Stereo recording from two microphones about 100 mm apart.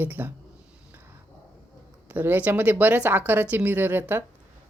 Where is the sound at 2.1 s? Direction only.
20° right (ahead or behind).